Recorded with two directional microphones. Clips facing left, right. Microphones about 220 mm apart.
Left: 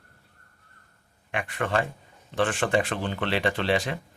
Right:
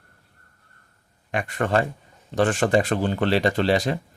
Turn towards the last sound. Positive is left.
turn(degrees=-40)  # may be behind; listen again after turning